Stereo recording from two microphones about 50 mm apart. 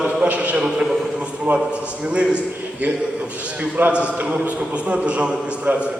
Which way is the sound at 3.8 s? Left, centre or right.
Right.